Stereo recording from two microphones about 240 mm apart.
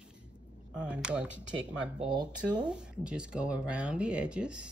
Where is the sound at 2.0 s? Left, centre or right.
Centre.